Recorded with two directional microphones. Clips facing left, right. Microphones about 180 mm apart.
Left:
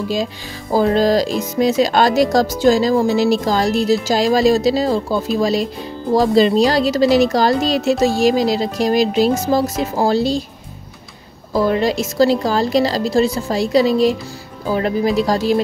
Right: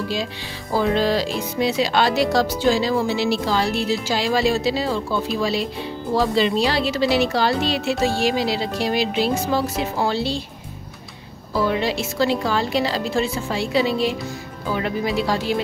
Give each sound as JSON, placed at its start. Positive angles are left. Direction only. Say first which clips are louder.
{"t": 0.7, "sound": "speech", "louder": "left 5 dB", "side_deg": 40}
{"t": 11.5, "sound": "speech", "louder": "left 5 dB", "side_deg": 45}